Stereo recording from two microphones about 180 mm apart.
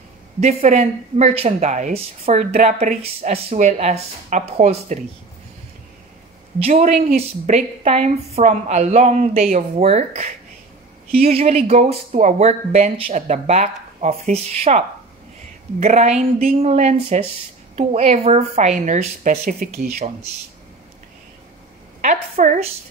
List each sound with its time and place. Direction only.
0.4 s speech: 35° right (ahead or behind)
6.7 s speech: 40° right (ahead or behind)
15.8 s speech: 40° right (ahead or behind); by 20.1 s 55° right (ahead or behind)
22.0 s a woman's voice: 40° right (ahead or behind)